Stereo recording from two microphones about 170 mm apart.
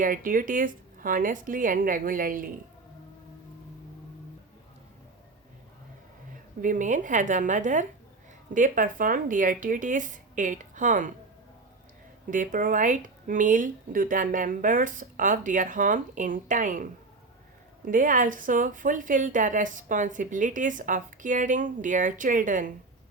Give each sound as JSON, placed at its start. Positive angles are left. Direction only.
{"t": 0.0, "sound": "a woman's voice", "side_deg": -50}
{"t": 6.6, "sound": "a woman's voice", "side_deg": -50}
{"t": 12.3, "sound": "a woman's voice", "side_deg": -50}